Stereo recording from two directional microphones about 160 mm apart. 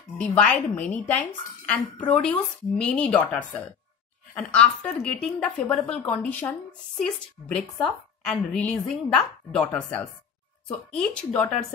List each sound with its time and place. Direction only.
0.2 s a woman's voice: 5° left (ahead or behind)